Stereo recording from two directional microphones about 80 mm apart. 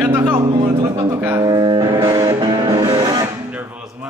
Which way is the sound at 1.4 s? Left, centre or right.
Right.